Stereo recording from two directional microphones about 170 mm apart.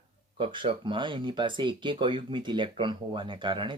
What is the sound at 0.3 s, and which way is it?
Speech, 30° right (ahead or behind).